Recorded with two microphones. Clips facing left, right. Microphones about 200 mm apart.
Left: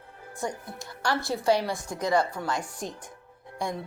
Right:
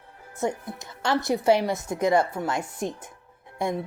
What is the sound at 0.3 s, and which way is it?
Speech, 20° right (ahead or behind).